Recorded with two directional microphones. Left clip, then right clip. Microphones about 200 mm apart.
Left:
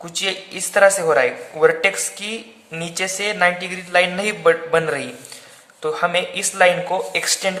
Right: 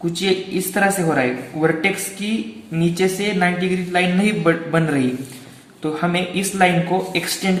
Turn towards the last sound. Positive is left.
turn(degrees=40)  # may be behind; listen again after turning